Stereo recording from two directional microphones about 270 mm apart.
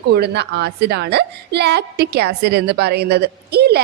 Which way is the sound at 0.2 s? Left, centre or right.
Right.